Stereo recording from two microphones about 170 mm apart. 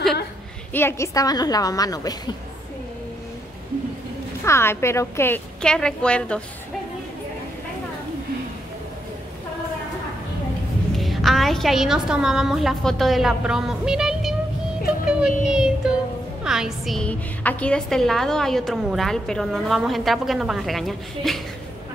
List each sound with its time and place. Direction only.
0.7 s a woman's voice: 15° left (ahead or behind)
4.5 s a woman's voice: 15° left (ahead or behind)
11.0 s a woman's voice: centre (ahead or behind)
15.0 s child singing: 5° right (ahead or behind)
15.4 s a woman's voice: 5° right (ahead or behind)